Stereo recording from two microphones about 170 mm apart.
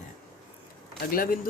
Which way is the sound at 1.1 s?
60° left (ahead or behind).